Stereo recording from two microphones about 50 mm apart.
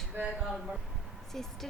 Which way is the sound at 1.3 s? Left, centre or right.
Centre.